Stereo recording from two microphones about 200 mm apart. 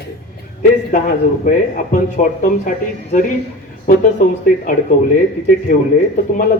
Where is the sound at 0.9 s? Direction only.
45° left (ahead or behind).